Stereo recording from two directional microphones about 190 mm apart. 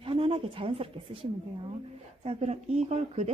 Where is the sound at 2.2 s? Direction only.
35° right (ahead or behind).